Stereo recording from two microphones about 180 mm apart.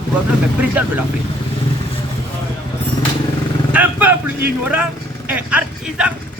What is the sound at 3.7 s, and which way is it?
A man's voice, 10° right (ahead or behind).